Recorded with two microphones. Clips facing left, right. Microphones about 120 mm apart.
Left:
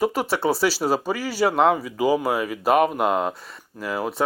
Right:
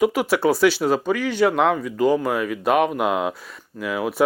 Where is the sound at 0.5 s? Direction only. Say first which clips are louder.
Right 5 dB; 35° left (ahead or behind).